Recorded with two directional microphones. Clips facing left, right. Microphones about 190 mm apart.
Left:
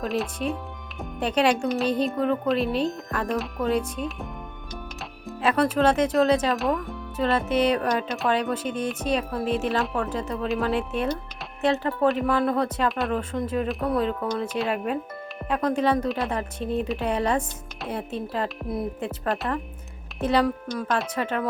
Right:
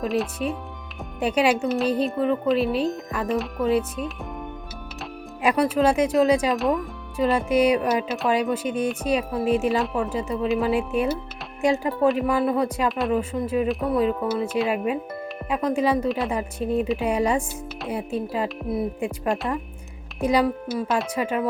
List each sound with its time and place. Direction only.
0.0 s a woman's voice: centre (ahead or behind)
5.4 s a woman's voice: 10° right (ahead or behind)